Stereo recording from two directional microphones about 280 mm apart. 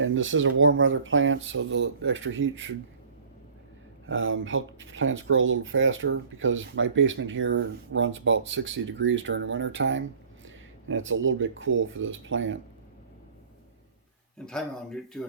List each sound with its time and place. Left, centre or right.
0.0 s speech: right
4.0 s speech: right
14.3 s speech: centre